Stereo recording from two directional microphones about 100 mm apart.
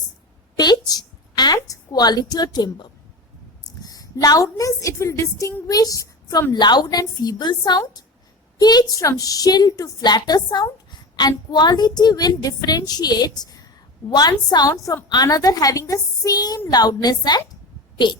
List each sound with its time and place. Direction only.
0.5 s a woman's voice: 45° left (ahead or behind)
3.8 s a sound: 40° left (ahead or behind)
4.5 s a woman's voice: 30° left (ahead or behind); by 18.2 s 50° left (ahead or behind)